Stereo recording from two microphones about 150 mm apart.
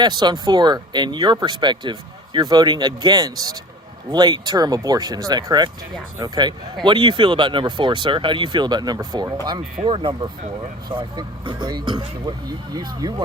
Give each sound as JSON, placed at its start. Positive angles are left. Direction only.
{"t": 0.0, "sound": "speech", "side_deg": -30}